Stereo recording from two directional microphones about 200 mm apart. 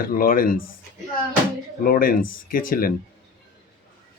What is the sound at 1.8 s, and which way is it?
Speech, 45° left (ahead or behind).